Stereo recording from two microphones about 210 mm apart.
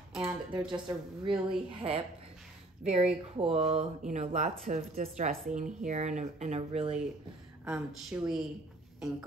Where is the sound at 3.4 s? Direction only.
30° right (ahead or behind).